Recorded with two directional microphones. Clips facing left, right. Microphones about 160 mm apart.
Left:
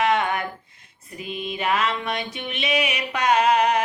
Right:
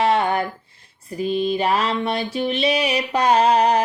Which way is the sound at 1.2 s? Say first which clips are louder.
Right 8 dB; 35° right (ahead or behind).